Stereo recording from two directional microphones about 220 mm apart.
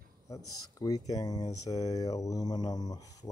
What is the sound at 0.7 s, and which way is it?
Speech, 15° left (ahead or behind).